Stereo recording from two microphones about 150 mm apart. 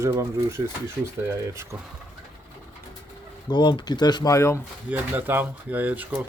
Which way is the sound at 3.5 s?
30° left (ahead or behind).